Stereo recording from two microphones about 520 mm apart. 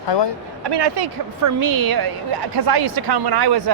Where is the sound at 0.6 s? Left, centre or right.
Right.